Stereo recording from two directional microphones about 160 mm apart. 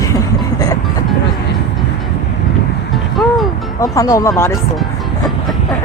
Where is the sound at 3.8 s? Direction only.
20° left (ahead or behind).